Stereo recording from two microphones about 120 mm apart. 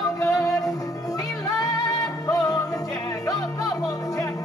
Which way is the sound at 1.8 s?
30° left (ahead or behind).